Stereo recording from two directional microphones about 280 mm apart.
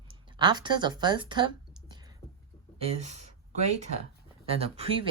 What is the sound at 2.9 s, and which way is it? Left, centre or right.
Speech, right.